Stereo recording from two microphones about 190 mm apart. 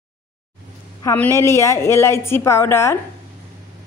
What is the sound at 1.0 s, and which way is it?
A woman's voice, 20° left (ahead or behind).